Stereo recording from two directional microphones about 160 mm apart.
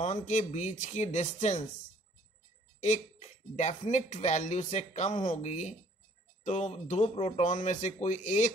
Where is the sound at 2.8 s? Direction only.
45° left (ahead or behind).